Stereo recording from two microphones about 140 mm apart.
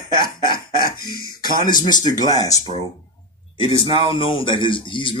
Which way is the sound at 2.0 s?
60° left (ahead or behind).